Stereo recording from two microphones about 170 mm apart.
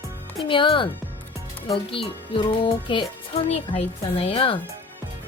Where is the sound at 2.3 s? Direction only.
30° left (ahead or behind).